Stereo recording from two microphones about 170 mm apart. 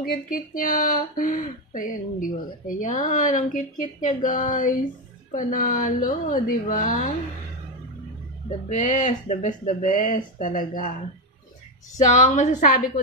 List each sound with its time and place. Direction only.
0.0 s speech: 55° left (ahead or behind)
8.5 s speech: 50° left (ahead or behind)
12.0 s speech: 45° left (ahead or behind)